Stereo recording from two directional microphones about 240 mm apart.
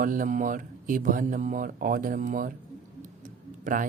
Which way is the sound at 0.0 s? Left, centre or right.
Right.